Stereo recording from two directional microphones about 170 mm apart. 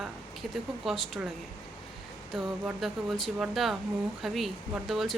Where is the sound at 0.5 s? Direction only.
Centre (ahead or behind).